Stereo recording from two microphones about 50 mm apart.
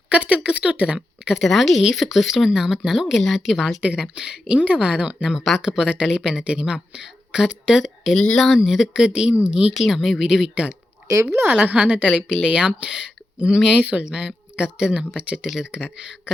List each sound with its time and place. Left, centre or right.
0.1 s a sound: right
0.6 s a woman's voice: right
1.5 s speech: centre
3.8 s a woman's voice: centre
5.3 s speech: centre
5.6 s speech: centre
9.7 s speech: centre
11.6 s a woman's voice: right
12.0 s speech: centre
12.5 s speech: centre